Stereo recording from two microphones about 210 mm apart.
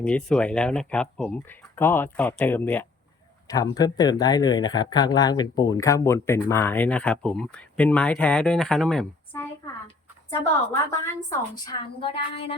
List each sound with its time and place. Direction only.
0.0 s a woman's voice: 5° left (ahead or behind); by 12.5 s 25° left (ahead or behind)